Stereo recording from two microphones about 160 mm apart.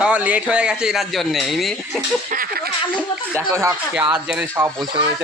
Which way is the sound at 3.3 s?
20° right (ahead or behind).